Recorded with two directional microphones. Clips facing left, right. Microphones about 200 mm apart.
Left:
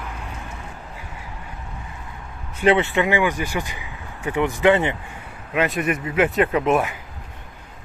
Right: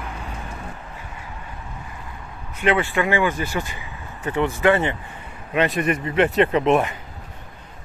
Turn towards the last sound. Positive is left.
turn(degrees=5)  # may be behind; listen again after turning